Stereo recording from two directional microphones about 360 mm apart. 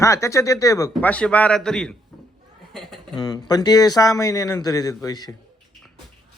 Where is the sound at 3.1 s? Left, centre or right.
Centre.